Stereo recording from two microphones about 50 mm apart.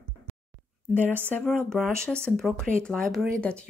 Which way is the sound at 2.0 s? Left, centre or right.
Centre.